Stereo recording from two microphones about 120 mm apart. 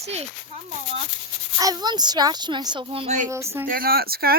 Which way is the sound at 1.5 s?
35° right (ahead or behind).